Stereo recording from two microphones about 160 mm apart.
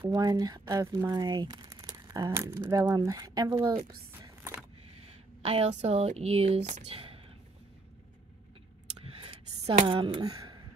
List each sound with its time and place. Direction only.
0.1 s speech: 25° right (ahead or behind)
5.4 s speech: 40° right (ahead or behind)
6.9 s whispering: 35° right (ahead or behind)
9.2 s a sound: 35° right (ahead or behind)